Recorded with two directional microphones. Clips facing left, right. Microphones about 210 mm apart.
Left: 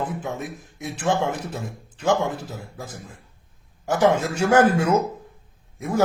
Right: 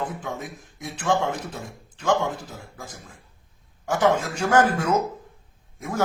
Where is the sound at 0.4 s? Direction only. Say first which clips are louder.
Left 3 dB; 90° left.